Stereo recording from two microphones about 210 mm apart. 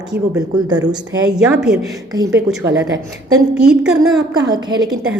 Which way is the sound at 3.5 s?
5° right (ahead or behind).